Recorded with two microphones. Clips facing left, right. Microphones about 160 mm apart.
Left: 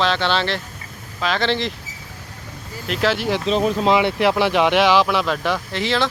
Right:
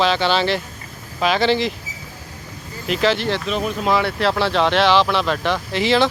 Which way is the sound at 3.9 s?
15° left (ahead or behind).